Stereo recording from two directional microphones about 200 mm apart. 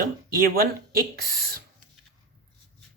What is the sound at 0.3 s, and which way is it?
Speech, 45° right (ahead or behind).